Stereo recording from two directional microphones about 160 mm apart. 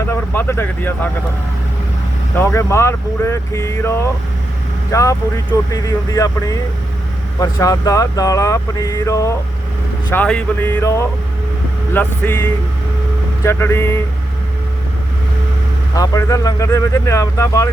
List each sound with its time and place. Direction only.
0.1 s speech: 15° left (ahead or behind)
2.3 s speech: 15° left (ahead or behind)
10.1 s speech: 10° left (ahead or behind)
13.4 s speech: 15° left (ahead or behind)
16.0 s speech: 20° left (ahead or behind)